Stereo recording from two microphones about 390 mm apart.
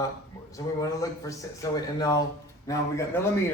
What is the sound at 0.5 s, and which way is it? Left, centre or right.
Speech, centre.